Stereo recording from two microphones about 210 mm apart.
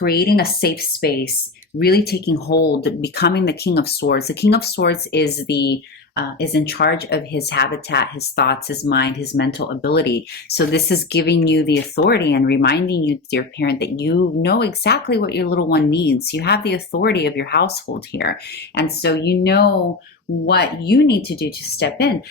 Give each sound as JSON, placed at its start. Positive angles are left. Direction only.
{"t": 0.0, "sound": "speech", "side_deg": 45}